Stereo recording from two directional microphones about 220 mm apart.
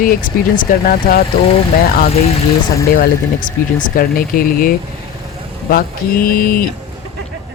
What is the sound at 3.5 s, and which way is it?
Speech, 40° left (ahead or behind).